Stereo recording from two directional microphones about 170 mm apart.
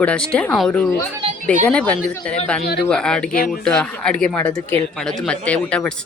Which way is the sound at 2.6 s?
70° left (ahead or behind).